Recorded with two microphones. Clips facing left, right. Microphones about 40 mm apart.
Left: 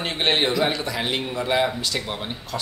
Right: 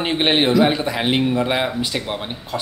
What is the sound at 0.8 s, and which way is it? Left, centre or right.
Speech, right.